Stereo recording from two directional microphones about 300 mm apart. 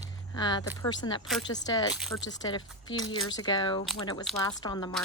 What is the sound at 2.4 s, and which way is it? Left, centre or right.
Speech, centre.